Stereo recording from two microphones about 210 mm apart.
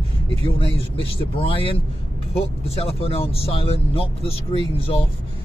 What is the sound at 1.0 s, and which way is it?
A man's voice, 25° left (ahead or behind).